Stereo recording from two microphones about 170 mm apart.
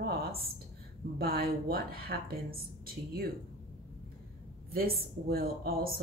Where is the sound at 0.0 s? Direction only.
65° right (ahead or behind).